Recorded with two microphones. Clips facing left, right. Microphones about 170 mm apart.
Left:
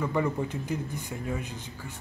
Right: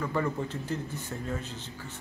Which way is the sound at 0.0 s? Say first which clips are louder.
Left 2 dB; 15° left (ahead or behind).